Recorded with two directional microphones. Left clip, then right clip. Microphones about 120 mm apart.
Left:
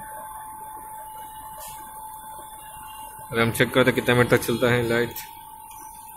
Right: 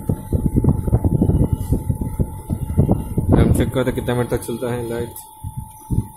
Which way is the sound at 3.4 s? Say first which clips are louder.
Left 5 dB; 35° right (ahead or behind).